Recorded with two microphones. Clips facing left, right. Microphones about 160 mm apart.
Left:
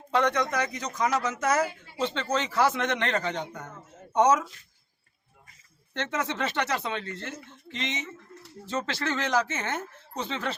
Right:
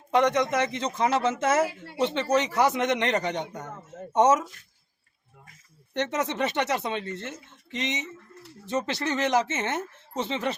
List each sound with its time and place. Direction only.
0.1 s speech: 20° right (ahead or behind)
5.9 s speech: 20° right (ahead or behind)